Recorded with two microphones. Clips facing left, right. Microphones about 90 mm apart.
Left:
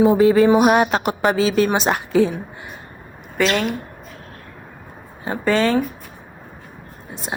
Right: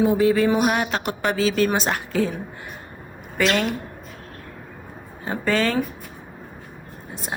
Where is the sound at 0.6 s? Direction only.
30° left (ahead or behind).